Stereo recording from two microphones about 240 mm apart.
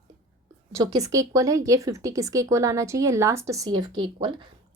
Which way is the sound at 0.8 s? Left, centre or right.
Centre.